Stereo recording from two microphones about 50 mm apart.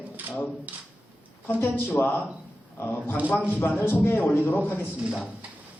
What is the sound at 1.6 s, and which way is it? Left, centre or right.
Speech, left.